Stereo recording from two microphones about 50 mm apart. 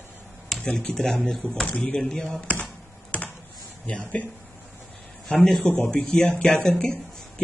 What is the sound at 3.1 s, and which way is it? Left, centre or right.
Computer keyboard, left.